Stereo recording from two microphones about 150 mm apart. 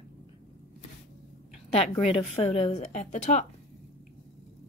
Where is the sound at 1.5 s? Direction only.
45° left (ahead or behind).